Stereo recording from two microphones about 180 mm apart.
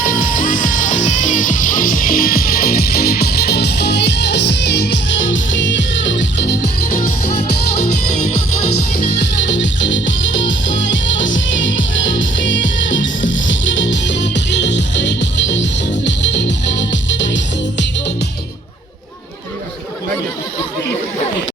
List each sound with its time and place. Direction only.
0.0 s music: 50° left (ahead or behind); by 6.6 s 80° left
9.4 s music: 85° left